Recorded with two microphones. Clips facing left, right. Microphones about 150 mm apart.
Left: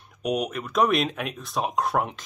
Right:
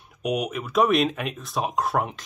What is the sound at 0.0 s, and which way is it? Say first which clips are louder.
Speech: even; centre (ahead or behind).